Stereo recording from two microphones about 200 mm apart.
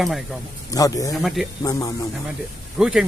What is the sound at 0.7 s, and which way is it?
Speech, 15° left (ahead or behind).